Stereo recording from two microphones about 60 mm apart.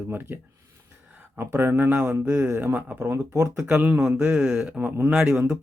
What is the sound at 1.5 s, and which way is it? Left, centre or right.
Speech, right.